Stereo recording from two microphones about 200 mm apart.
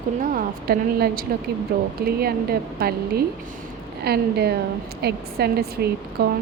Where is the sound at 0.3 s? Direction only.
50° right (ahead or behind).